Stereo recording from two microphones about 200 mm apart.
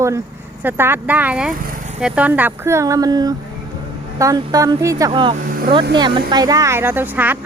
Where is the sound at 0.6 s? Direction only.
10° right (ahead or behind).